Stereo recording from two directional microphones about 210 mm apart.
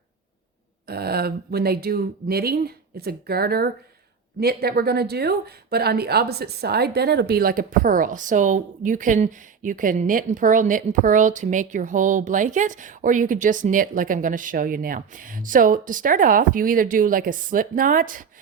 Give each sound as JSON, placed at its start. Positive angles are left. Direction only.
{"t": 0.9, "sound": "speech", "side_deg": -50}